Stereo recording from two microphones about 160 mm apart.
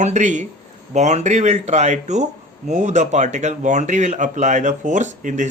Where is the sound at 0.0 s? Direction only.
50° right (ahead or behind).